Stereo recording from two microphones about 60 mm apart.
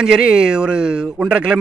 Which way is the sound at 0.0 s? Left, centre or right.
Centre.